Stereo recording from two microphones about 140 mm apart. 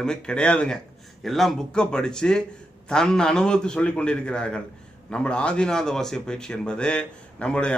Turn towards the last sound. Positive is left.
turn(degrees=10)  # may be behind; listen again after turning